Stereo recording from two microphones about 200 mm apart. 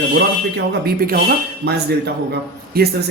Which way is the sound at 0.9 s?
45° right (ahead or behind).